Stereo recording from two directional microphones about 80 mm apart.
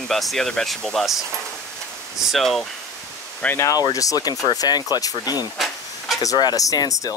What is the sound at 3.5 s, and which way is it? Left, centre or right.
Speech, left.